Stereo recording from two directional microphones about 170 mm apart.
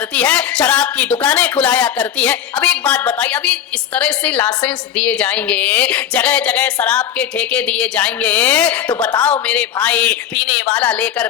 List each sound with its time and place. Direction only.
0.1 s speech: 10° left (ahead or behind)